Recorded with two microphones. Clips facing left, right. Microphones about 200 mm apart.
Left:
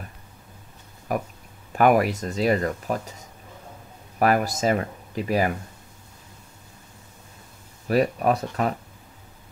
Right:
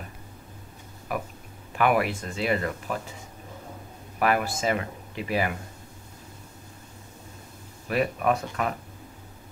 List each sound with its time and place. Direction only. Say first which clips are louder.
1.1 s speech: left 4 dB; 40° left (ahead or behind)
4.2 s speech: left 4 dB; 40° left (ahead or behind)
7.9 s speech: left 4 dB; 35° left (ahead or behind)